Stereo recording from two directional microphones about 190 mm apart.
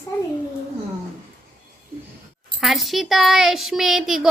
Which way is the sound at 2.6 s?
Centre (ahead or behind).